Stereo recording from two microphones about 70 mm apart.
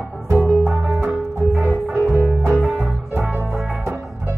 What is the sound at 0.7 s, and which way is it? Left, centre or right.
Music, centre.